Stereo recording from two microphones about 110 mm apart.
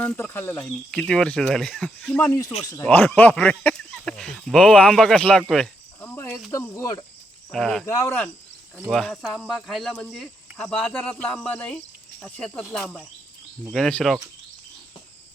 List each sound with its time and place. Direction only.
0.0 s speech: 15° left (ahead or behind)
0.9 s speech: 5° left (ahead or behind)
2.2 s speech: 30° left (ahead or behind)
2.8 s speech: 15° left (ahead or behind)
6.0 s cricket: 20° left (ahead or behind)
6.5 s speech: 25° left (ahead or behind)
7.5 s speech: 5° left (ahead or behind)
7.9 s speech: 25° left (ahead or behind)
8.9 s speech: 5° left (ahead or behind)
13.7 s speech: 5° left (ahead or behind)